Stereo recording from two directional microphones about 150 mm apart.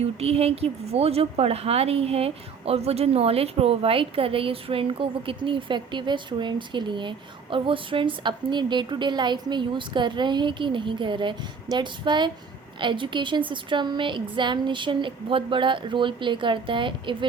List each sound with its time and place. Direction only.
0.0 s speech: 40° right (ahead or behind)